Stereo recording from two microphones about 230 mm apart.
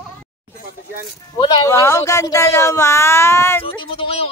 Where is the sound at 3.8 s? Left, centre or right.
Left.